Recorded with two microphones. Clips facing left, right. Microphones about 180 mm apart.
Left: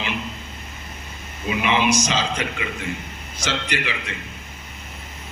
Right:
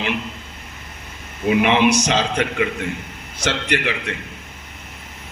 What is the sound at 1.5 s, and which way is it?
A man's voice, 60° right (ahead or behind).